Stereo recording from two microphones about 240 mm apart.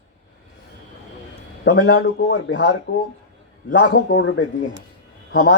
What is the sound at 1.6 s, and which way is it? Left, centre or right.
Speech, left.